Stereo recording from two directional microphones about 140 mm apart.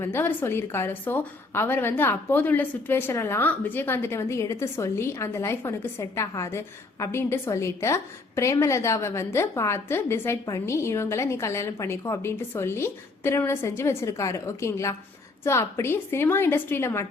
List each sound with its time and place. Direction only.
0.0 s a woman's voice: 15° left (ahead or behind)